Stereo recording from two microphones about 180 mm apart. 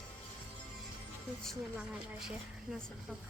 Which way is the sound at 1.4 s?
Centre (ahead or behind).